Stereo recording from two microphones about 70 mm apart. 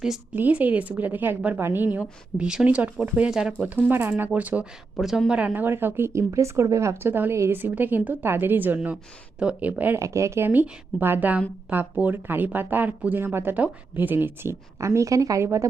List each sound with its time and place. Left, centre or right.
0.3 s speech: right
2.0 s a woman's voice: centre
2.6 s a woman's voice: right
3.8 s speech: right
4.4 s speech: right
4.9 s a woman's voice: centre
5.3 s a woman's voice: centre
5.5 s speech: right
10.0 s speech: right
14.8 s a woman's voice: right